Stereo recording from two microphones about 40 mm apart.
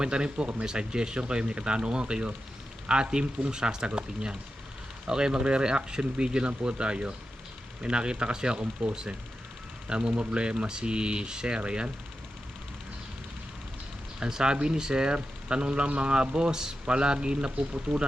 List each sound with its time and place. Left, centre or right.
0.0 s speech: right
14.2 s speech: centre